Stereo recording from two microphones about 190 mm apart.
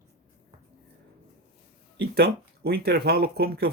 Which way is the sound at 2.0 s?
55° right (ahead or behind).